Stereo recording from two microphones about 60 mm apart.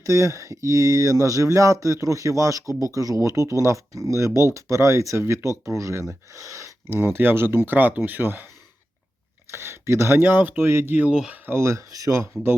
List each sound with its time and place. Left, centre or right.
0.0 s speech: right
6.9 s speech: right
9.5 s speech: right
11.9 s speech: right